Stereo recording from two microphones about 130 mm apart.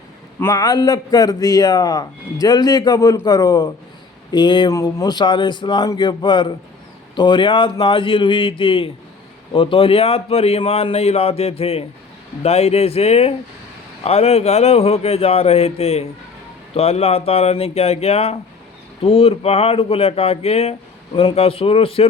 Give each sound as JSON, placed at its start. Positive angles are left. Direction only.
{"t": 0.5, "sound": "a man's voice", "side_deg": 30}
{"t": 4.7, "sound": "a man's voice", "side_deg": 25}